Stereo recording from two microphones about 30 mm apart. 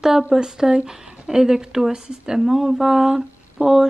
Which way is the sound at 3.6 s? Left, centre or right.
Right.